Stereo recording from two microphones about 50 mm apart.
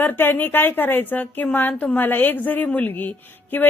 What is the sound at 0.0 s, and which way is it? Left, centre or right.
A woman's voice, left.